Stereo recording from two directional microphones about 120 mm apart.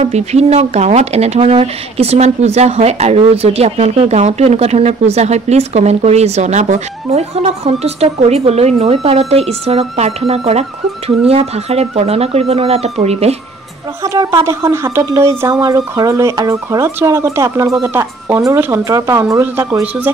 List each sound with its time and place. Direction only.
0.0 s speech: 65° right (ahead or behind)
14.0 s speech: 30° right (ahead or behind)